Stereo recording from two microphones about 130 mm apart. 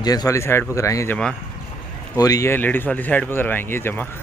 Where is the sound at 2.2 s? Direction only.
25° left (ahead or behind).